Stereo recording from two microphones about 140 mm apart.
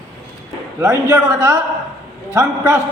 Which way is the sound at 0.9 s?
25° right (ahead or behind).